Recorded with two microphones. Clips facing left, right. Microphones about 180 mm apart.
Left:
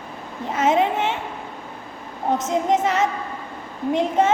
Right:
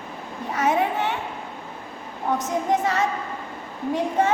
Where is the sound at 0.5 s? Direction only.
20° left (ahead or behind).